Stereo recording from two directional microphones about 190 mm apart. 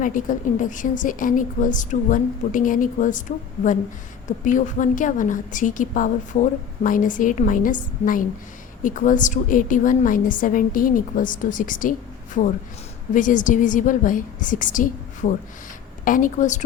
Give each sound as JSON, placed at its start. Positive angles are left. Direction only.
{"t": 0.0, "sound": "a woman's voice", "side_deg": 45}